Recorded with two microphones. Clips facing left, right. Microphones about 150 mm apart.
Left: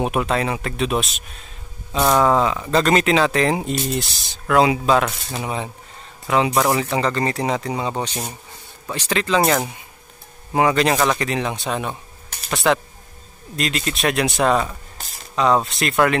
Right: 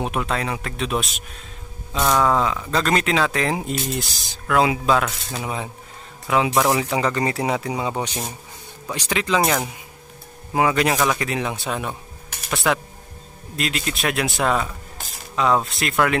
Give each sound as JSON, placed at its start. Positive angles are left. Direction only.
{"t": 0.0, "sound": "speech", "side_deg": 5}
{"t": 2.0, "sound": "speech", "side_deg": 15}
{"t": 2.7, "sound": "speech", "side_deg": 0}
{"t": 9.4, "sound": "speech", "side_deg": 0}